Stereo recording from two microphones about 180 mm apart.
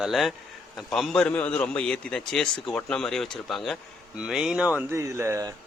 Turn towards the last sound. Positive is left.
turn(degrees=-15)  # may be behind; listen again after turning